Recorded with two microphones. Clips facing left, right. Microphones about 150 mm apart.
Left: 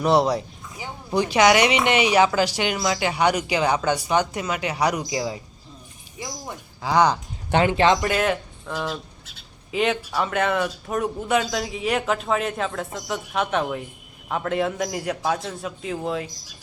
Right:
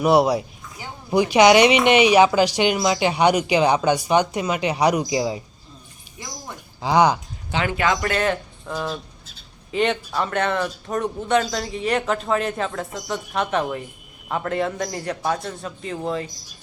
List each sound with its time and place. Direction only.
0.0 s a woman's voice: 10° right (ahead or behind)
6.8 s speech: 15° right (ahead or behind)
7.6 s speech: 30° left (ahead or behind)
8.1 s speech: 5° left (ahead or behind)